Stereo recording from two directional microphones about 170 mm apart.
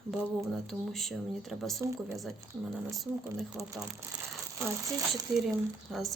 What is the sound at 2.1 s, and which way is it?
A woman's voice, centre (ahead or behind).